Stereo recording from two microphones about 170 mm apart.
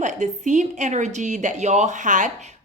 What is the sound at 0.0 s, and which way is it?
Speech, 45° right (ahead or behind).